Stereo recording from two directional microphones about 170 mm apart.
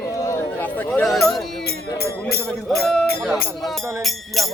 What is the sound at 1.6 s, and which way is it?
Music, 70° left (ahead or behind).